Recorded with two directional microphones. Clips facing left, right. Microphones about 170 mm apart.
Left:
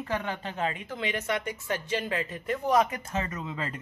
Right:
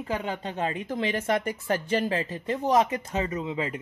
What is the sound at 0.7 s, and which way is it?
Speech, 40° right (ahead or behind).